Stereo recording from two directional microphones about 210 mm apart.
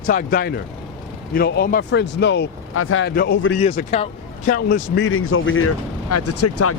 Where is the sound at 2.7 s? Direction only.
75° left (ahead or behind).